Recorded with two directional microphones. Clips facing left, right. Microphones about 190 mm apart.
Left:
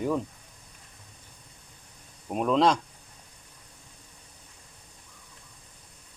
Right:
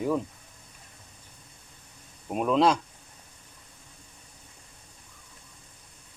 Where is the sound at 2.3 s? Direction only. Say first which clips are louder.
Even; 5° right (ahead or behind).